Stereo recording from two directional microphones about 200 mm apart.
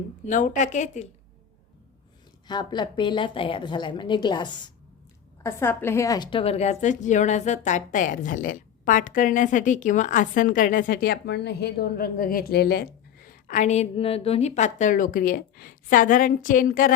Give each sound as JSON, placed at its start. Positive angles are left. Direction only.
{"t": 0.3, "sound": "a woman's voice", "side_deg": 40}
{"t": 2.5, "sound": "a woman's voice", "side_deg": 20}